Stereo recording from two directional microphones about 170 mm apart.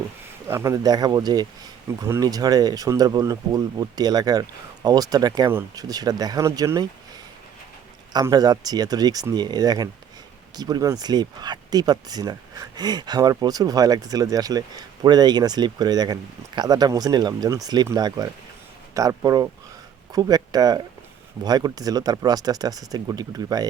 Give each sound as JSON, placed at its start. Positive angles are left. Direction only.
{"t": 0.4, "sound": "speech", "side_deg": -15}
{"t": 8.1, "sound": "speech", "side_deg": -20}